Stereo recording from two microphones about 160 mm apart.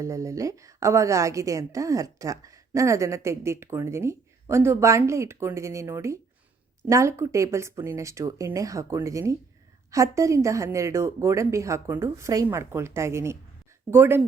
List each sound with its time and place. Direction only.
0.0 s a woman's voice: 20° right (ahead or behind)